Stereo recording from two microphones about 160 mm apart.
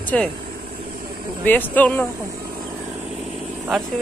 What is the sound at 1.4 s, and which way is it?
Speech, 10° left (ahead or behind).